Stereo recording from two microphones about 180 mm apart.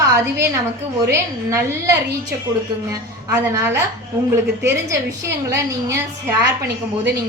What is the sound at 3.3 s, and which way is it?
A woman's voice, 15° right (ahead or behind).